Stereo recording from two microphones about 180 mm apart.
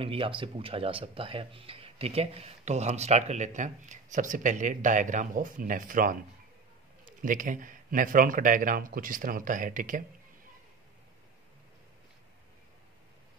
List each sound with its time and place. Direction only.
0.0 s speech: 30° right (ahead or behind); by 6.1 s 50° right (ahead or behind)
7.2 s speech: 50° right (ahead or behind)